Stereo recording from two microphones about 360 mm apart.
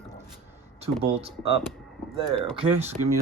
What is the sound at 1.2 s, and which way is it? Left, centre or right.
Speech, centre.